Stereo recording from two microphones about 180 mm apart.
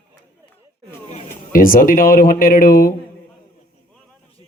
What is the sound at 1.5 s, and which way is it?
Speech, 50° left (ahead or behind).